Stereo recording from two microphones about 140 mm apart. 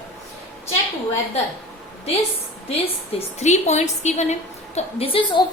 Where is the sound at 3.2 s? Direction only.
55° left (ahead or behind).